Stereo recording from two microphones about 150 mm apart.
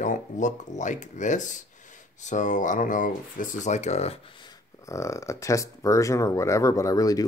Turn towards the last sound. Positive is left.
turn(degrees=25)  # may be behind; listen again after turning